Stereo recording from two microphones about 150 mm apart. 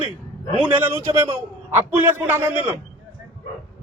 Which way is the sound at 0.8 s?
15° right (ahead or behind).